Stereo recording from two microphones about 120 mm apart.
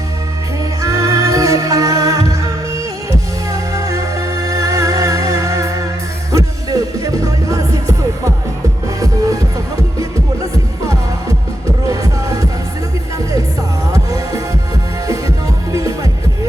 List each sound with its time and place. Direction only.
0.8 s music: 30° right (ahead or behind)
13.9 s music: 30° right (ahead or behind)
15.7 s music: 30° right (ahead or behind)